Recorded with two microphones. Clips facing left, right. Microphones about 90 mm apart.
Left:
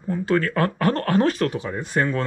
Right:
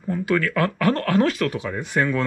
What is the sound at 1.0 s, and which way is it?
Speech, 35° left (ahead or behind).